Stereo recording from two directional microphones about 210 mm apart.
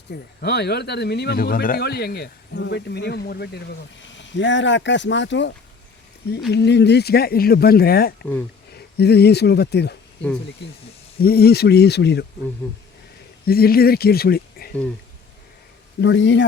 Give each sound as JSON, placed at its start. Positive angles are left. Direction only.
{"t": 0.1, "sound": "speech", "side_deg": 50}
{"t": 11.2, "sound": "speech", "side_deg": 45}
{"t": 13.4, "sound": "speech", "side_deg": 45}
{"t": 16.0, "sound": "speech", "side_deg": 60}